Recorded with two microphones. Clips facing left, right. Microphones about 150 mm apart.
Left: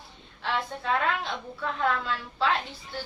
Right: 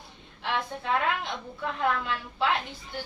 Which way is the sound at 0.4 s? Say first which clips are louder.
Left 1 dB; 15° right (ahead or behind).